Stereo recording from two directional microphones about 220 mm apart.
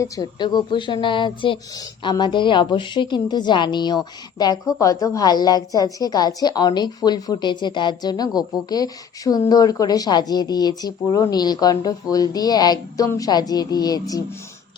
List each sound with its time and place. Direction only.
0.0 s a woman's voice: 20° left (ahead or behind)